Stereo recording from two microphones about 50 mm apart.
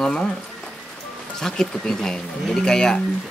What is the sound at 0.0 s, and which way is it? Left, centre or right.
Speech, centre.